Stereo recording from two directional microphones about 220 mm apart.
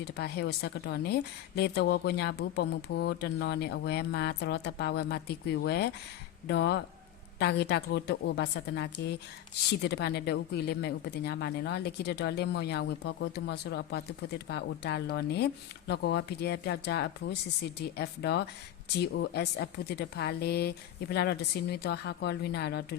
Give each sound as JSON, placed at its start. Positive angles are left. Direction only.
{"t": 0.0, "sound": "a woman's voice", "side_deg": 50}